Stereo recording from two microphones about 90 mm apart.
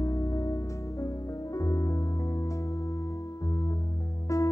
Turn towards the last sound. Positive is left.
turn(degrees=35)  # may be behind; listen again after turning